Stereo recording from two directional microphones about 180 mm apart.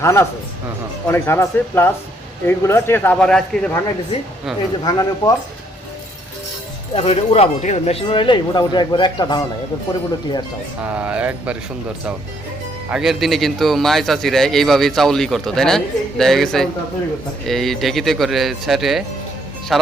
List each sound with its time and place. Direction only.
0.0 s speech: 15° left (ahead or behind)
4.8 s speech: 25° left (ahead or behind)
6.9 s speech: 35° left (ahead or behind)
10.8 s speech: 5° right (ahead or behind)
12.9 s a man's voice: centre (ahead or behind)